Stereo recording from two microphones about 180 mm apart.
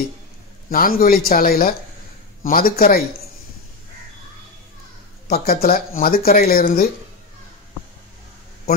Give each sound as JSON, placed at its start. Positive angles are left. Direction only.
{"t": 0.7, "sound": "a man's voice", "side_deg": 55}
{"t": 5.3, "sound": "speech", "side_deg": 55}